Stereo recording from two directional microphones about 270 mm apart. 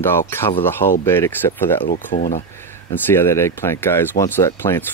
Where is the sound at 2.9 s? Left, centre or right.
Centre.